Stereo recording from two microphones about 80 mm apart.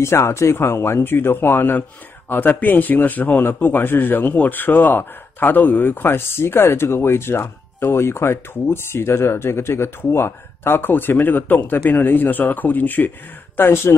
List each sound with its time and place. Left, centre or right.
0.0 s speech: left